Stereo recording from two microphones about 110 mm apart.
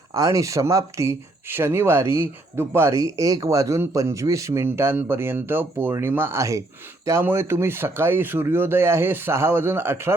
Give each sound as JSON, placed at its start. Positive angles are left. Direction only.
{"t": 0.1, "sound": "speech", "side_deg": -30}